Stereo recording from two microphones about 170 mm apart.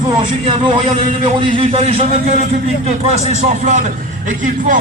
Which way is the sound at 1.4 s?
35° right (ahead or behind).